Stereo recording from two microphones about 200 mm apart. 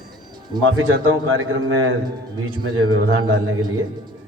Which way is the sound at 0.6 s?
90° right.